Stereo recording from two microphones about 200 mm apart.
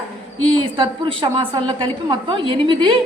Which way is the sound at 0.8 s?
25° right (ahead or behind).